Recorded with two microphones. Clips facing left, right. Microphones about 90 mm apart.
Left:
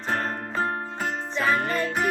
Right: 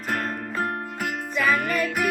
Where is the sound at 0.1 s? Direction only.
30° left (ahead or behind).